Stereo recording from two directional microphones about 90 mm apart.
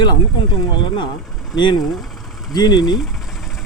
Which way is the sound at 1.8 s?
Centre (ahead or behind).